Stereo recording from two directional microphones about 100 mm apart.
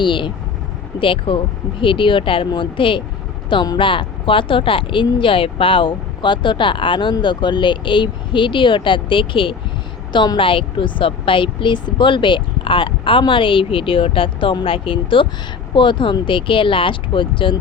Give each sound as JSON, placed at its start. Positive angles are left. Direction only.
{"t": 0.0, "sound": "speech", "side_deg": 55}